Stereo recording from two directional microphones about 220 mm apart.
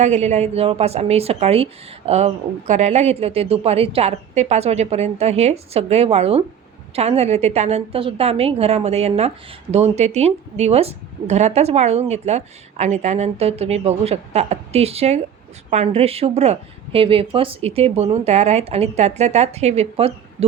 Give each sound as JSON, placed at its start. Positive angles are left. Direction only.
{"t": 0.0, "sound": "speech", "side_deg": -30}